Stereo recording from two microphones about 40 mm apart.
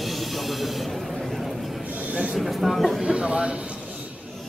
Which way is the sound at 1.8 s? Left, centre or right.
Right.